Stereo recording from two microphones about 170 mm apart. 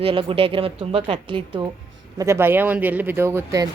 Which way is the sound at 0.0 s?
30° right (ahead or behind).